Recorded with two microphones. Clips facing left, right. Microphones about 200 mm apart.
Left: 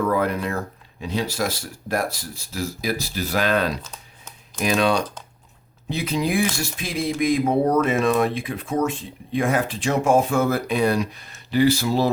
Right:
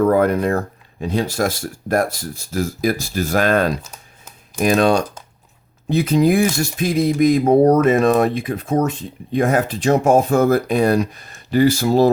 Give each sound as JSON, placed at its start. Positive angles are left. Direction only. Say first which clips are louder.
{"t": 0.0, "sound": "speech", "louder": "right 7 dB", "side_deg": -50}